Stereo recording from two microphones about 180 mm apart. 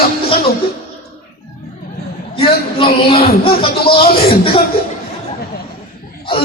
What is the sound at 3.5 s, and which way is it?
Speech, 30° left (ahead or behind).